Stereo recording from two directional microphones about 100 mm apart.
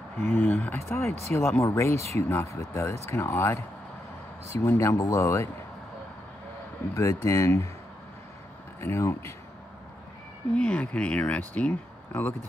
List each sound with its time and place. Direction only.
0.2 s speech: 20° left (ahead or behind)
7.0 s speech: 30° left (ahead or behind)
8.8 s speech: 25° left (ahead or behind)
10.5 s speech: 10° left (ahead or behind)